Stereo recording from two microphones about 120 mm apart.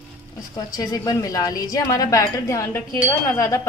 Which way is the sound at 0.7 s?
30° left (ahead or behind).